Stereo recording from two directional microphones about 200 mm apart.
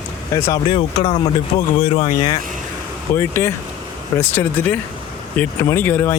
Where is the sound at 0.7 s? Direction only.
25° left (ahead or behind).